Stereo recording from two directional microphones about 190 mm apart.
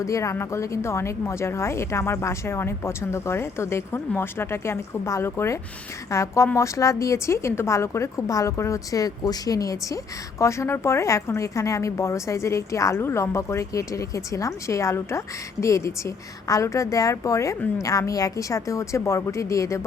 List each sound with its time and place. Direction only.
0.0 s a woman's voice: 15° left (ahead or behind)